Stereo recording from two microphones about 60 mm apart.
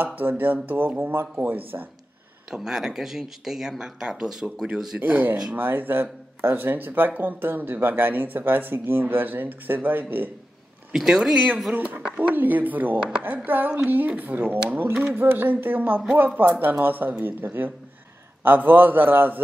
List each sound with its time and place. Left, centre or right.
0.0 s speech: right
2.5 s speech: centre
5.0 s speech: right
10.9 s speech: centre
11.3 s speech: centre
11.7 s speech: right